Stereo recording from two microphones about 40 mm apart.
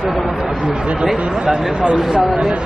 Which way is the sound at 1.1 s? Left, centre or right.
Right.